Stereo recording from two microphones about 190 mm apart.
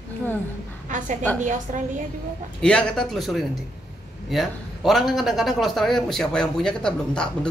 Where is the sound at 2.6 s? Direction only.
5° left (ahead or behind).